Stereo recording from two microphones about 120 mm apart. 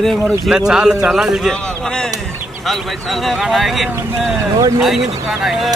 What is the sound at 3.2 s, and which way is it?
Speech, centre (ahead or behind).